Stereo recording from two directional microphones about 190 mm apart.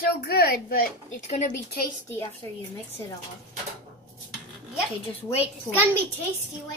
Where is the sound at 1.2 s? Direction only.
35° left (ahead or behind).